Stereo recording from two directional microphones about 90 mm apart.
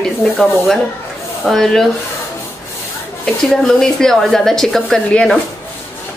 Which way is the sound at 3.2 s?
5° left (ahead or behind).